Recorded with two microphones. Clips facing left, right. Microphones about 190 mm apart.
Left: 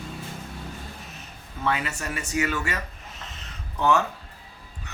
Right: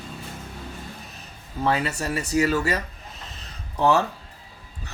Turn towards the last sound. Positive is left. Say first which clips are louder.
# right 2 dB
turn(degrees=-35)  # may be behind; listen again after turning